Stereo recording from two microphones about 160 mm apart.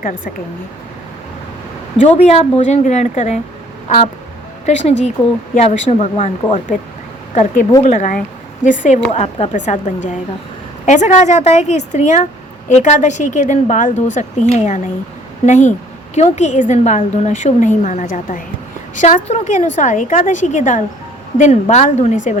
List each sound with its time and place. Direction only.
2.0 s speech: 40° left (ahead or behind)
9.1 s speech: 40° left (ahead or behind)